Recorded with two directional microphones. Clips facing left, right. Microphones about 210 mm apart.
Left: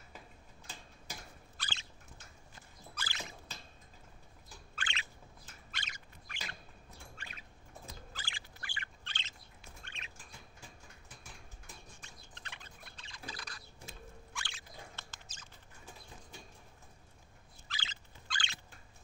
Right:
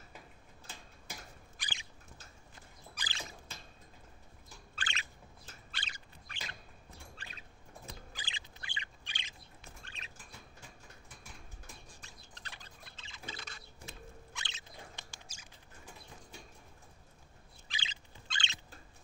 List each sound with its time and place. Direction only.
1.6 s a sound: 15° right (ahead or behind)
2.9 s rodents: 15° right (ahead or behind)
4.7 s bird: 40° right (ahead or behind)
5.7 s a sound: 30° right (ahead or behind)
8.1 s bird: 20° right (ahead or behind)
9.8 s bird: 35° right (ahead or behind)
12.0 s a sound: 35° right (ahead or behind)
14.3 s rodents: 20° right (ahead or behind)
17.6 s turkey: 15° right (ahead or behind)